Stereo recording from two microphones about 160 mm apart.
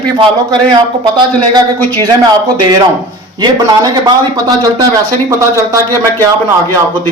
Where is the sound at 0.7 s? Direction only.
30° right (ahead or behind).